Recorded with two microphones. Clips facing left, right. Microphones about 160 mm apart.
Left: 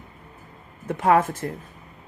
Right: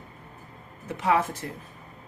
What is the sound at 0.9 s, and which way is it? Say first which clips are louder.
Speech: left 5 dB; 50° left (ahead or behind).